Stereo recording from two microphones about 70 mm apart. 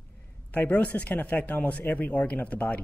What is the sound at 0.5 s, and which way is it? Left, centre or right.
A man's voice, left.